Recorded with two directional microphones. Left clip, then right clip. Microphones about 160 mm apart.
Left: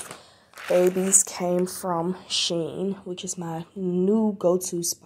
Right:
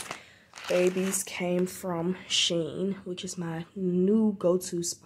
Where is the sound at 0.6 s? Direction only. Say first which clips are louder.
Left 5 dB; 15° left (ahead or behind).